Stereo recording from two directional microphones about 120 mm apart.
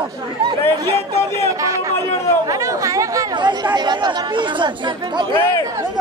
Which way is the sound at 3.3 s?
40° right (ahead or behind).